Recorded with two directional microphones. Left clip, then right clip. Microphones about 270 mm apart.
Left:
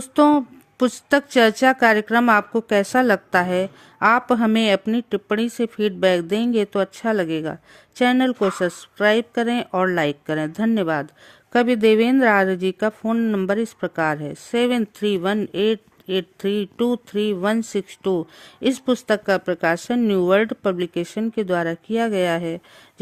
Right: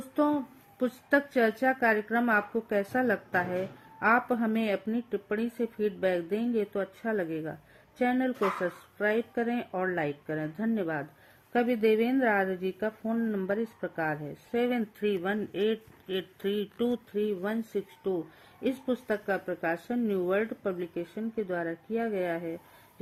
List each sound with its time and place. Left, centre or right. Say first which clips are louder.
0.2 s a woman's voice: left 12 dB; left